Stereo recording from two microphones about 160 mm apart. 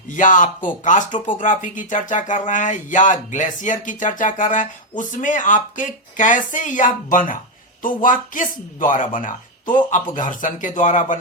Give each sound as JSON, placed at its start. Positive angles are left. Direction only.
{"t": 0.1, "sound": "speech", "side_deg": 55}